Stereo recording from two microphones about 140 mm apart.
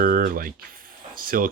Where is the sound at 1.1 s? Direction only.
90° right.